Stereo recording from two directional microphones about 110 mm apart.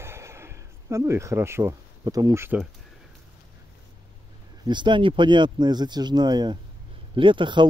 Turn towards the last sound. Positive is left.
turn(degrees=-45)  # may be behind; listen again after turning